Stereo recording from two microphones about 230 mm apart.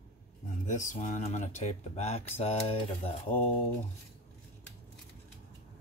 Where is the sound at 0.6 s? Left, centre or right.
Left.